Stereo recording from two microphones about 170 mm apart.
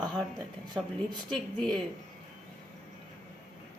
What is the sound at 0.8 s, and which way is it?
Speech, 5° left (ahead or behind).